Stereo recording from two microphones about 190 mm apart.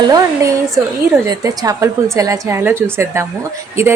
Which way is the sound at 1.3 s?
20° right (ahead or behind).